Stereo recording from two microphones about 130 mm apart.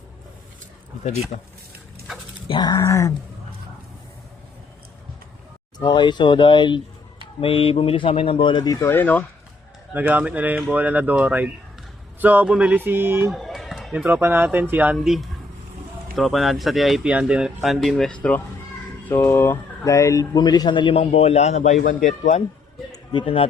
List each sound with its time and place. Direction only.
1.3 s speech: 90° left
2.5 s speech: 30° left (ahead or behind)
5.8 s speech: 35° left (ahead or behind); by 9.2 s 15° left (ahead or behind)
9.9 s speech: 15° right (ahead or behind)
13.3 s speech: centre (ahead or behind)
14.9 s speech: centre (ahead or behind); by 22.4 s 70° left (ahead or behind)
22.9 s a sound: 40° left (ahead or behind)